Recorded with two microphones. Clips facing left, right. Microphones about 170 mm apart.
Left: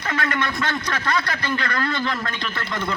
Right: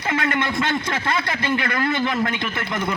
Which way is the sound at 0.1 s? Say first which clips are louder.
Right 2 dB; 25° right (ahead or behind).